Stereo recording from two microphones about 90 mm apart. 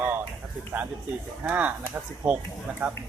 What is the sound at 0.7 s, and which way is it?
Speech, 25° right (ahead or behind).